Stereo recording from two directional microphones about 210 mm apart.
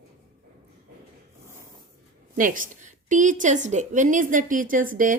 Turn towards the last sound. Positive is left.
turn(degrees=-40)  # may be behind; listen again after turning